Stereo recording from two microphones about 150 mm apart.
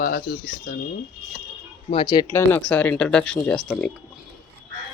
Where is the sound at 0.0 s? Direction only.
80° left.